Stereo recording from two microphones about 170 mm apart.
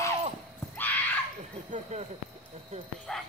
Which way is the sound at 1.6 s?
40° right (ahead or behind).